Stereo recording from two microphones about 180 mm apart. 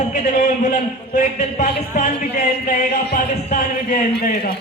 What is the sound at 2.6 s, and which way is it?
Music, 50° left (ahead or behind).